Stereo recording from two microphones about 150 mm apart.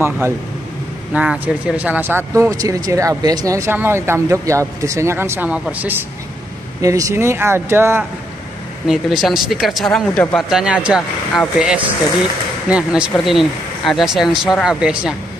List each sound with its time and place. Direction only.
1.1 s speech: 5° right (ahead or behind)
6.8 s speech: 20° right (ahead or behind)
8.8 s speech: centre (ahead or behind)